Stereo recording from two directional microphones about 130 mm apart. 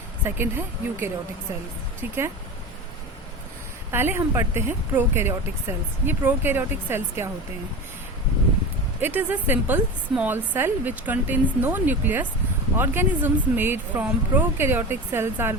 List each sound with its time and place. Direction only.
0.3 s speech: 15° right (ahead or behind)
3.9 s speech: 20° right (ahead or behind)
9.0 s speech: 15° right (ahead or behind)